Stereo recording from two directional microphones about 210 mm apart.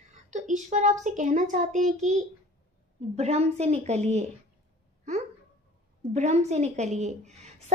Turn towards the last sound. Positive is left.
turn(degrees=-30)  # may be behind; listen again after turning